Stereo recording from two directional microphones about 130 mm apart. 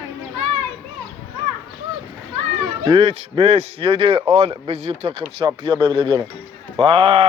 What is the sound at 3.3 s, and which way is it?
Speech, 50° right (ahead or behind).